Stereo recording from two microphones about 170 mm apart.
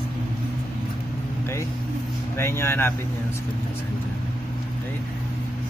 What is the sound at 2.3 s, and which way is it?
Speech, 15° left (ahead or behind).